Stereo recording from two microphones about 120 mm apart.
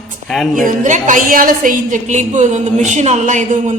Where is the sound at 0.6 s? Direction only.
90° right.